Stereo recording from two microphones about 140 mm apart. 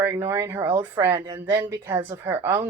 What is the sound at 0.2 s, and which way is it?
Speech, 20° right (ahead or behind).